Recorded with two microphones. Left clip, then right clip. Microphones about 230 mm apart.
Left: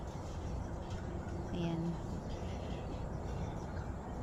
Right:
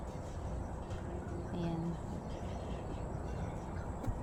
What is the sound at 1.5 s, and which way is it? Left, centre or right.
Speech, centre.